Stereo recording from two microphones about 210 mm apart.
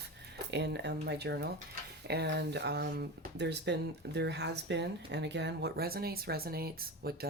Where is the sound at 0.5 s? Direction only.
55° right (ahead or behind).